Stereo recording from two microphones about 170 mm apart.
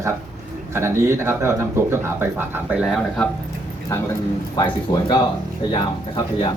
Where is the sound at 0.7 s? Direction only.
15° right (ahead or behind); by 3.3 s centre (ahead or behind).